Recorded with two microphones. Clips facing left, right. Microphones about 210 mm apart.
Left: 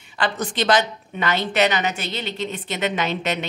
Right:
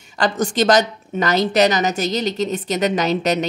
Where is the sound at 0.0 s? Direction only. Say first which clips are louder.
Right 5 dB; 45° right (ahead or behind).